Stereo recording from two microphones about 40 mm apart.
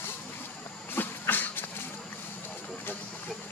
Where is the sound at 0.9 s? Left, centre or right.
Left.